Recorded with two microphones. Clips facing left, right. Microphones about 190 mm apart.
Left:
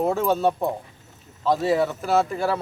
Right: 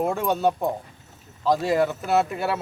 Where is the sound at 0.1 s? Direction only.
Centre (ahead or behind).